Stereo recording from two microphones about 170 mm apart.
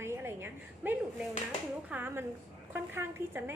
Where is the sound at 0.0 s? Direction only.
15° right (ahead or behind).